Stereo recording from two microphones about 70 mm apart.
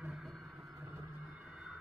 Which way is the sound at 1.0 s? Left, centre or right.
Centre.